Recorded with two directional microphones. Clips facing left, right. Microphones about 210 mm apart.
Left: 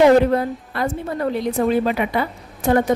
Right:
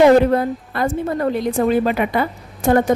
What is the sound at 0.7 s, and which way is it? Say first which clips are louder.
A woman's voice: right 3 dB; 50° right (ahead or behind).